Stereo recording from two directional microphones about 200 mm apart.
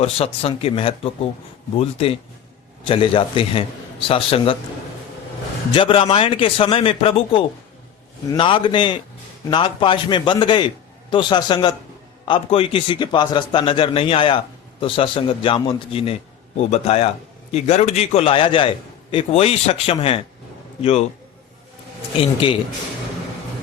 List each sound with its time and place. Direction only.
0.0 s speech: 30° left (ahead or behind)
5.7 s a man's voice: 25° left (ahead or behind)
22.4 s speech: 25° left (ahead or behind)